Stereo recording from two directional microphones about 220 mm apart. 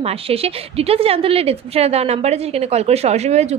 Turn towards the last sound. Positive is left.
turn(degrees=-30)  # may be behind; listen again after turning